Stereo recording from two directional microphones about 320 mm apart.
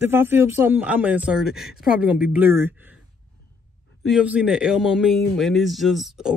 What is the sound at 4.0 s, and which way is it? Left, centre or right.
Speech, centre.